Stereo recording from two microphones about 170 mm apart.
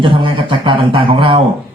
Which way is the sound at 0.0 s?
30° right (ahead or behind).